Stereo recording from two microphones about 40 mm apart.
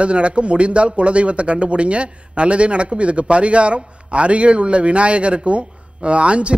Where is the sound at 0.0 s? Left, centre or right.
Right.